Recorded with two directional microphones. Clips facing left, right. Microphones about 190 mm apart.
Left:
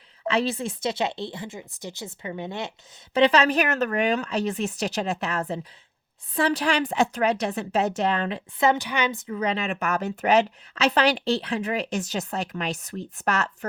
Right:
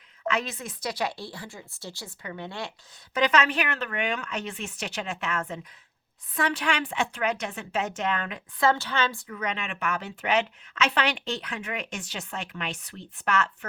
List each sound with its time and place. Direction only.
0.3 s a woman's voice: 30° left (ahead or behind)
3.2 s a woman's voice: 30° left (ahead or behind)
8.6 s a woman's voice: 15° left (ahead or behind); by 13.7 s 40° left (ahead or behind)